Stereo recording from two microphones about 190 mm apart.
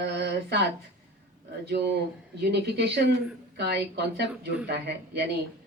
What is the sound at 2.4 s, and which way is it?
Speech, 60° right (ahead or behind).